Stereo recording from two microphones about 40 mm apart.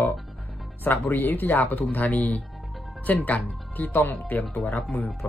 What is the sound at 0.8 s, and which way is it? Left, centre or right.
Speech, left.